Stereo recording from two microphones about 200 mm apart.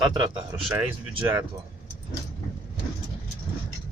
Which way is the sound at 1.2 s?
10° right (ahead or behind).